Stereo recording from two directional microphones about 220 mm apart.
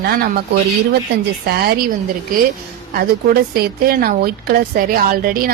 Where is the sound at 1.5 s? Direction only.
45° right (ahead or behind).